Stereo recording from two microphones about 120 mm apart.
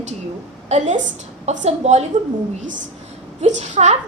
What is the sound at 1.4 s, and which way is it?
Speech, 70° right (ahead or behind).